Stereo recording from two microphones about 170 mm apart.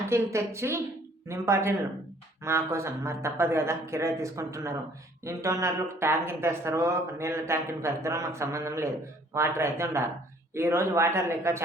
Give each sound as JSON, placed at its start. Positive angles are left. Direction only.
{"t": 0.1, "sound": "speech", "side_deg": -15}